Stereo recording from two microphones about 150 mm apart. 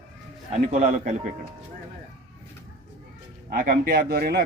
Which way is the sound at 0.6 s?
55° right (ahead or behind).